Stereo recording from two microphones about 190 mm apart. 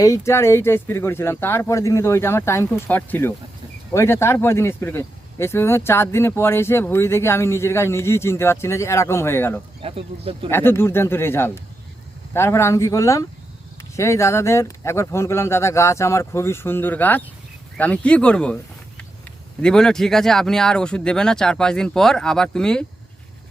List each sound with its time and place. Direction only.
0.0 s speech: 15° left (ahead or behind)
9.8 s speech: 30° right (ahead or behind)
10.5 s speech: 10° left (ahead or behind)